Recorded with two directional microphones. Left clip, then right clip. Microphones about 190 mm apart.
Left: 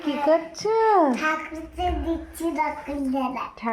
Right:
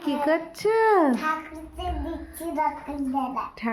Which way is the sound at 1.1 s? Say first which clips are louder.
Left 2 dB; centre (ahead or behind).